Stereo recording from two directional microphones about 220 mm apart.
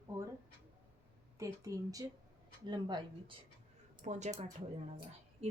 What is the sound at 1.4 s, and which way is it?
Speech, 15° right (ahead or behind).